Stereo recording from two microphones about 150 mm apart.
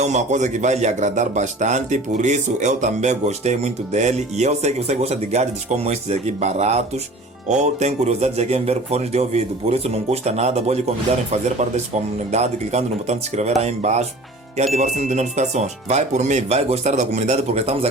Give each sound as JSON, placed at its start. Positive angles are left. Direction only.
{"t": 0.0, "sound": "a man's voice", "side_deg": -50}